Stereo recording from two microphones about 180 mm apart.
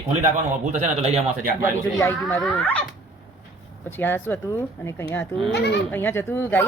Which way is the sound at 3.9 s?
10° left (ahead or behind).